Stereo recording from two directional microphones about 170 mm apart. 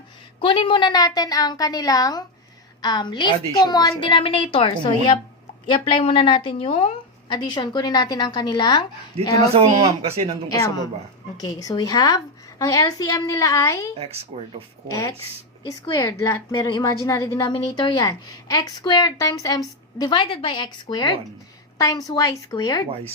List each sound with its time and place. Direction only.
0.3 s a woman's voice: 30° left (ahead or behind)
9.6 s speech: 35° right (ahead or behind)
10.5 s a woman's voice: 20° left (ahead or behind)
14.0 s speech: 35° right (ahead or behind)
15.6 s a woman's voice: 20° left (ahead or behind)